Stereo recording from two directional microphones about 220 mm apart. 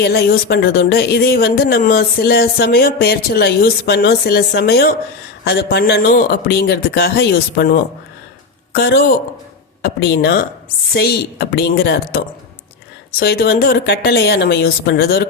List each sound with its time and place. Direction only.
0.0 s speech: 45° left (ahead or behind)